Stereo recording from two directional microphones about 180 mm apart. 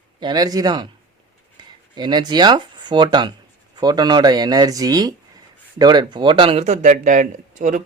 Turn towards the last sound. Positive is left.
turn(degrees=-45)  # may be behind; listen again after turning